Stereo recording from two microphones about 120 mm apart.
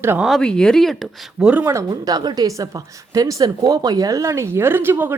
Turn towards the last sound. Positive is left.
turn(degrees=-15)  # may be behind; listen again after turning